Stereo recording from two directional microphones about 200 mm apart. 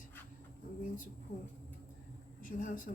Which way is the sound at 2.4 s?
40° left (ahead or behind).